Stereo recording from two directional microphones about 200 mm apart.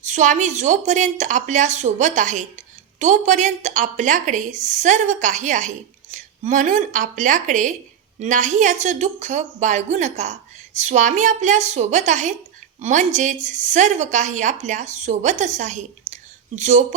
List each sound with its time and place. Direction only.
0.0 s a woman's voice: 35° right (ahead or behind)